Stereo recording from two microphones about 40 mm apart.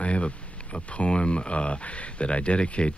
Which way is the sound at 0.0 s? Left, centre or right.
Left.